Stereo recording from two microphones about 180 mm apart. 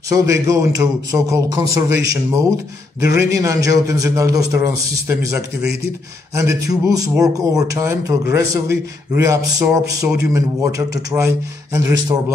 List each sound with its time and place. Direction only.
0.1 s a man's voice: 20° right (ahead or behind)